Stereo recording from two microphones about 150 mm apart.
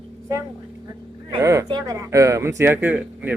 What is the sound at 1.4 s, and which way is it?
Speech, 20° right (ahead or behind).